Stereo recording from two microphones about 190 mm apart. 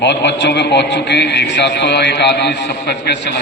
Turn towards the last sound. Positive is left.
turn(degrees=60)  # may be behind; listen again after turning